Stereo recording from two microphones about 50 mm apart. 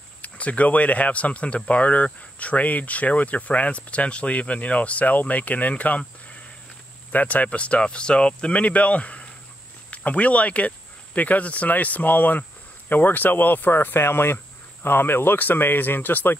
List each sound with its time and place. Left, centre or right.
0.2 s speech: left
7.1 s speech: left